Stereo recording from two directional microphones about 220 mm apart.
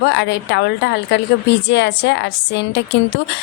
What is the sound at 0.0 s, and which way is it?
A woman's voice, 55° left (ahead or behind).